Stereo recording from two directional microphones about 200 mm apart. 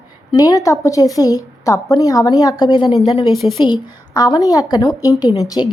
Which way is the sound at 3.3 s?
Centre (ahead or behind).